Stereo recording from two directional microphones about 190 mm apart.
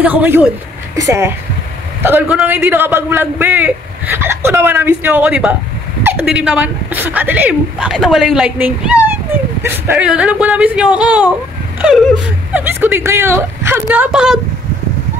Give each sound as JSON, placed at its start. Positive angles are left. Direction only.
{"t": 0.0, "sound": "a man's voice", "side_deg": -10}
{"t": 12.5, "sound": "a man's voice", "side_deg": -10}